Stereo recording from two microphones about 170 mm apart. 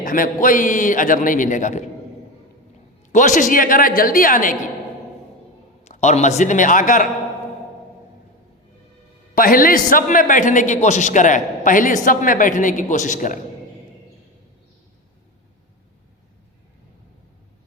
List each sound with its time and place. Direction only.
0.0 s a man's voice: 55° left (ahead or behind)
3.1 s a man's voice: 50° left (ahead or behind)
5.8 s a man's voice: 40° left (ahead or behind)
9.3 s a man's voice: 55° left (ahead or behind)